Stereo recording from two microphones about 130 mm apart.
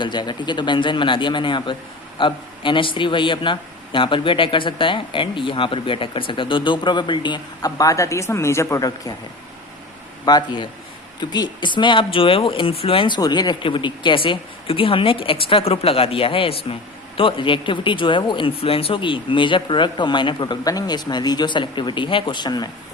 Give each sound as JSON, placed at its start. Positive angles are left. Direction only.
{"t": 0.0, "sound": "a man's voice", "side_deg": 35}
{"t": 10.2, "sound": "a man's voice", "side_deg": 35}